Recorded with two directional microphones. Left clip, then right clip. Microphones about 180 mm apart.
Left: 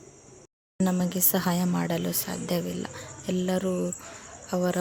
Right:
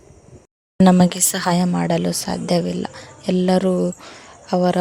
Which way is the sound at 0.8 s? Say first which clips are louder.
Right 13 dB; 45° right (ahead or behind).